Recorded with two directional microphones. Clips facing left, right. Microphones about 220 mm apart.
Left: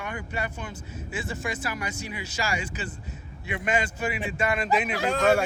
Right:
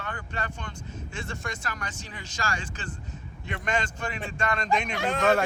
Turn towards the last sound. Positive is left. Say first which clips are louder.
# left 2 dB
turn(degrees=10)  # may be behind; listen again after turning